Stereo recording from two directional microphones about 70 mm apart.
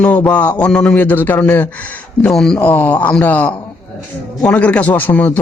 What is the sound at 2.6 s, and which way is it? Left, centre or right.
A man's voice, left.